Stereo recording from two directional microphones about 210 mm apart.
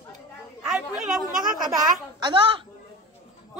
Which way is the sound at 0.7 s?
Centre (ahead or behind).